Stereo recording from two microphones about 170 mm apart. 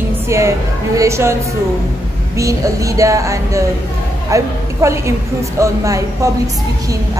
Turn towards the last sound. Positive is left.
turn(degrees=-20)  # may be behind; listen again after turning